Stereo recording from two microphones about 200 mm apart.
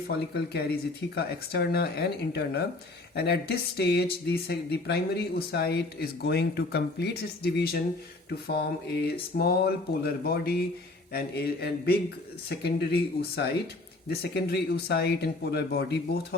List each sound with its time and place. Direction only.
0.3 s speech: 50° left (ahead or behind)